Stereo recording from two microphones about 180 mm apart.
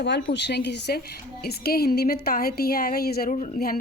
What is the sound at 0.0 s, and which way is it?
A woman's voice, 75° left (ahead or behind).